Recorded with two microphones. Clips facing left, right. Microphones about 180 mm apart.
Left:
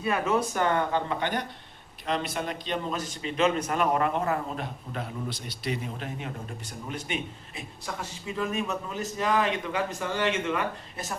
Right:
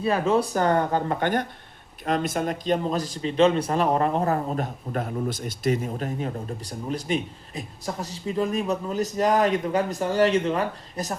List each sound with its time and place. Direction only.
0.0 s a man's voice: 30° right (ahead or behind)